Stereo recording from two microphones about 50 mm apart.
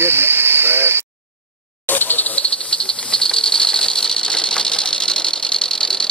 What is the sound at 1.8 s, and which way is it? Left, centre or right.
Insect, left.